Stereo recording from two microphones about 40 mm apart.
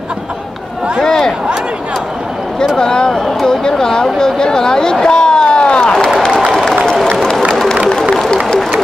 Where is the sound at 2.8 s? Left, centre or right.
Centre.